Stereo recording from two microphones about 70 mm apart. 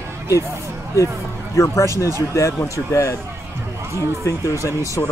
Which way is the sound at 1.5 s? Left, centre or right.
Left.